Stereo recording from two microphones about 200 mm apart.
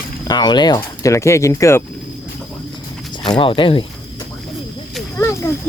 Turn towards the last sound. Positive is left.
turn(degrees=15)  # may be behind; listen again after turning